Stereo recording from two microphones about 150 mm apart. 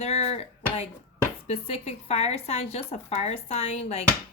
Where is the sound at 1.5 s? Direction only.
40° left (ahead or behind).